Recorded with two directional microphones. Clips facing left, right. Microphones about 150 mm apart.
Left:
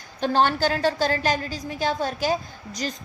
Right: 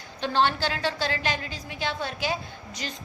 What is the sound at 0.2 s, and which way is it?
A woman's voice, 45° left (ahead or behind).